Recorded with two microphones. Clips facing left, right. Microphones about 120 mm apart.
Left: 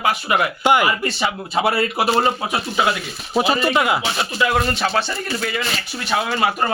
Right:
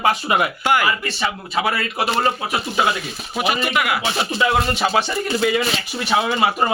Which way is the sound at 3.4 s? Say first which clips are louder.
Left 3 dB; 30° left (ahead or behind).